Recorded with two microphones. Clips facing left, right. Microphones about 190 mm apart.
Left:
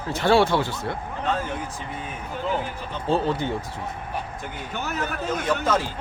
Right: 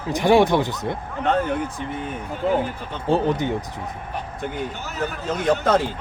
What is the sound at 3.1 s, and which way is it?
Speech, 15° right (ahead or behind).